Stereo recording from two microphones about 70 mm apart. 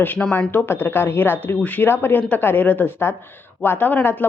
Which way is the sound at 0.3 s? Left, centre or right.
Left.